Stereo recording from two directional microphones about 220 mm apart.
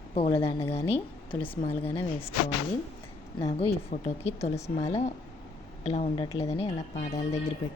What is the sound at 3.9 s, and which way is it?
Speech, 30° left (ahead or behind).